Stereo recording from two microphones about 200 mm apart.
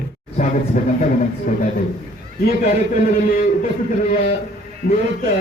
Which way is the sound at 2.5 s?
45° left (ahead or behind).